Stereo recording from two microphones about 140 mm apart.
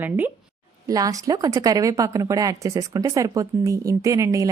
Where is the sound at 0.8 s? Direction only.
25° right (ahead or behind).